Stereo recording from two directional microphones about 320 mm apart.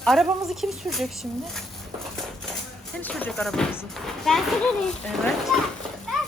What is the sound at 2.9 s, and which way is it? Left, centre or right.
Speech, centre.